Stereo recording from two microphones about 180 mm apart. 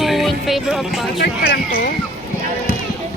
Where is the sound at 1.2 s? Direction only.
60° left (ahead or behind).